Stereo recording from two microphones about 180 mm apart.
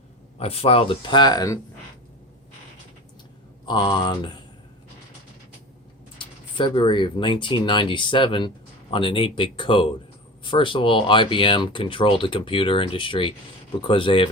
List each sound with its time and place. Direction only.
0.3 s speech: 35° left (ahead or behind)
3.7 s speech: 25° left (ahead or behind)
6.1 s speech: 25° left (ahead or behind)